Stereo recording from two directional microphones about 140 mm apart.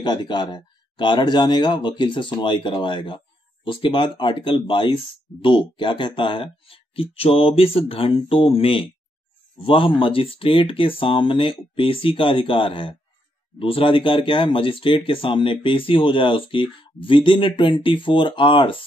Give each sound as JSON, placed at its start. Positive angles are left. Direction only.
{"t": 0.0, "sound": "speech", "side_deg": 30}